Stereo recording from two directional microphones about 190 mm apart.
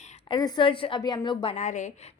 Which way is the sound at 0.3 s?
20° left (ahead or behind).